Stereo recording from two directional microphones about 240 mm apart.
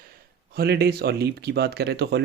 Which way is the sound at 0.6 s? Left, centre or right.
Right.